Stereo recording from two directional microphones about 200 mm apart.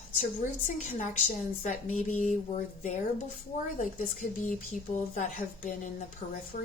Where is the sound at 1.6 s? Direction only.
40° left (ahead or behind).